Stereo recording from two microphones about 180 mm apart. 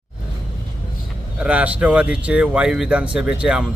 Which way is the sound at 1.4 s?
5° right (ahead or behind).